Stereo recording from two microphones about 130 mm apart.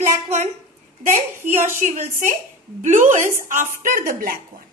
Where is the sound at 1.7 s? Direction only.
85° right.